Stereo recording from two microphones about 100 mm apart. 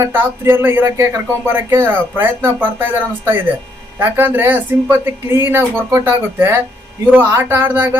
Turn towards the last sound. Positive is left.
turn(degrees=-20)  # may be behind; listen again after turning